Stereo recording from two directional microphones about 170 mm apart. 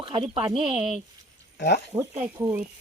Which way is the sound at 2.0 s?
15° right (ahead or behind).